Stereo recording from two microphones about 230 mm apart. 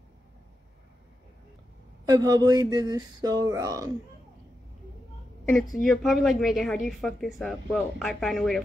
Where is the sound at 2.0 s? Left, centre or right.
Centre.